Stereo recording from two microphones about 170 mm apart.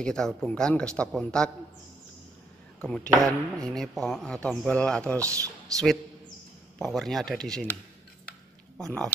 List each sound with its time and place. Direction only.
0.0 s speech: 5° left (ahead or behind)
2.8 s speech: 5° left (ahead or behind)
5.2 s speech: 20° right (ahead or behind)
6.8 s speech: centre (ahead or behind)
8.7 s speech: 5° left (ahead or behind)